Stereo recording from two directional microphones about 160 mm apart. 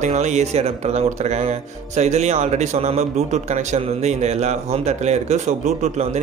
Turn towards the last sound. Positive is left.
turn(degrees=-45)  # may be behind; listen again after turning